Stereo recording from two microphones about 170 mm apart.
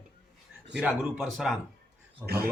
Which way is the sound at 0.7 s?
Centre (ahead or behind).